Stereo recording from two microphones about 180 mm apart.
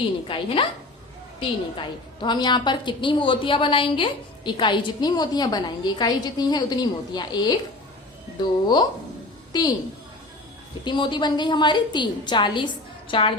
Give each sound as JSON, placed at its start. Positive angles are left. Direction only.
{"t": 0.3, "sound": "a woman's voice", "side_deg": 30}
{"t": 2.2, "sound": "a woman's voice", "side_deg": 25}
{"t": 10.8, "sound": "a woman's voice", "side_deg": 25}